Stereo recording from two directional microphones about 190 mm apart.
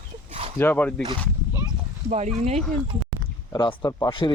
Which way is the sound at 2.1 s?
35° right (ahead or behind).